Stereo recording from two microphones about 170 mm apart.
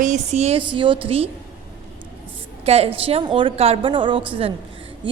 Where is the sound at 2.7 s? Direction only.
35° right (ahead or behind).